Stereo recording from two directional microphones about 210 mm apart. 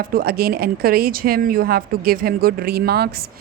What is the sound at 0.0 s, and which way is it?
Speech, 45° right (ahead or behind).